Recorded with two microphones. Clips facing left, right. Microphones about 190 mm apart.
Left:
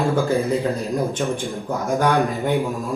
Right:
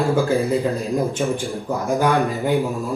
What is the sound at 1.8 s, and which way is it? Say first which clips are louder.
Speech: even; centre (ahead or behind).